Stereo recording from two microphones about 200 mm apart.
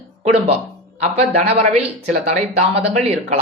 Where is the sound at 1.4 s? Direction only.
30° right (ahead or behind).